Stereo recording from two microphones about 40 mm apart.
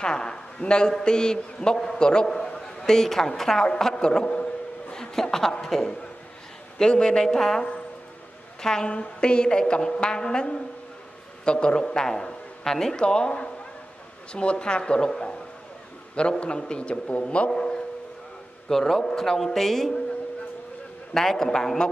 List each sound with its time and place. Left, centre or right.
0.0 s a woman's voice: left
11.8 s a man's voice: centre
17.5 s a woman's voice: centre
21.1 s a woman's voice: centre